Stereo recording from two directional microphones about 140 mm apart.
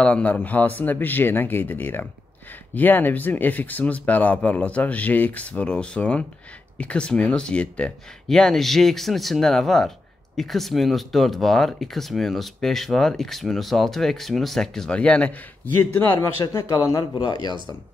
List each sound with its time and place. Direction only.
0.0 s speech: 10° left (ahead or behind); by 17.6 s 30° left (ahead or behind)